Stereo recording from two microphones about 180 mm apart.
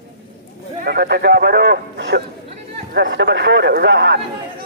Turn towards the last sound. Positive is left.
turn(degrees=-85)